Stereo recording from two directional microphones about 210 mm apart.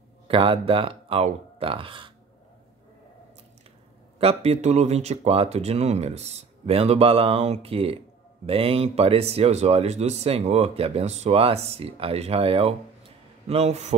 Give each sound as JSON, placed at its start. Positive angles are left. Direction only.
{"t": 0.3, "sound": "speech", "side_deg": -25}
{"t": 4.2, "sound": "speech", "side_deg": -30}